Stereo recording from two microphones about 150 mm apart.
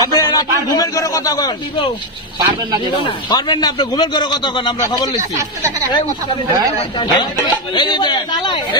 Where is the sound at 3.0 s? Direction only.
30° left (ahead or behind).